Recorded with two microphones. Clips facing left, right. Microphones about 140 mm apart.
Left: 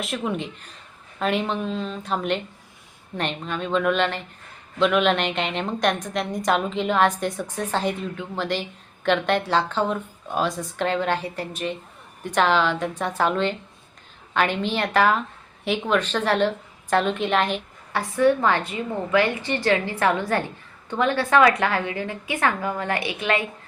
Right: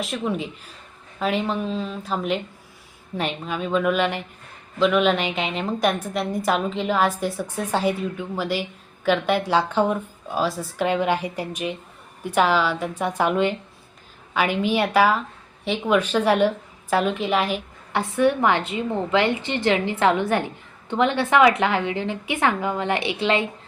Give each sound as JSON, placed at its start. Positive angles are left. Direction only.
{"t": 0.0, "sound": "a woman's voice", "side_deg": 0}
{"t": 17.9, "sound": "a woman's voice", "side_deg": -20}